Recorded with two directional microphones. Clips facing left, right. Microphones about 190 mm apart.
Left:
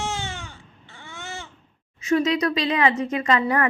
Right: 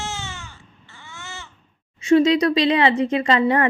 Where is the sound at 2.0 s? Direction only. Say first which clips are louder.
Right 5 dB; 30° right (ahead or behind).